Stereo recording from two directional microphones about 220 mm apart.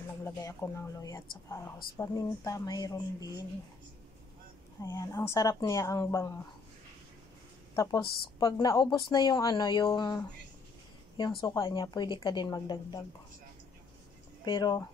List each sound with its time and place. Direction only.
0.2 s a woman's voice: 15° left (ahead or behind)
4.8 s a woman's voice: 15° left (ahead or behind)
7.7 s a woman's voice: 15° left (ahead or behind)
14.4 s speech: 20° left (ahead or behind)